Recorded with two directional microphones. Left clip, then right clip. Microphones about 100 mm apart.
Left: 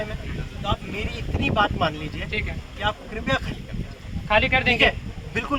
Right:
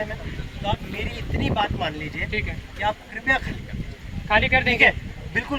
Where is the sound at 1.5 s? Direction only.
15° left (ahead or behind).